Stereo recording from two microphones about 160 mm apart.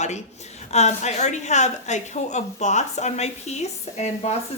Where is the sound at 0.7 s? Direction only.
45° left (ahead or behind).